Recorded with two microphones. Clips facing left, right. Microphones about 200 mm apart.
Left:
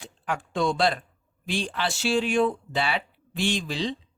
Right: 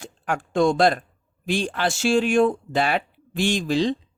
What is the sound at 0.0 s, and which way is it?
A woman's voice, 45° right (ahead or behind).